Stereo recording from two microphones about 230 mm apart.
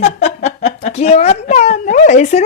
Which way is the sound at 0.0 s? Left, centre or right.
Left.